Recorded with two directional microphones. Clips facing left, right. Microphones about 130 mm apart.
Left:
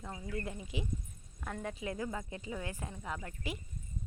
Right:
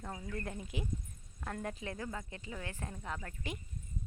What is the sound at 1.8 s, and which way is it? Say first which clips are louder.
Speech: left 3 dB; 15° left (ahead or behind).